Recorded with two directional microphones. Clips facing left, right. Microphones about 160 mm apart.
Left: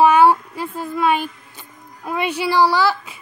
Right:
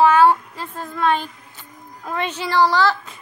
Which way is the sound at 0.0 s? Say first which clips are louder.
Left 1 dB; 15° left (ahead or behind).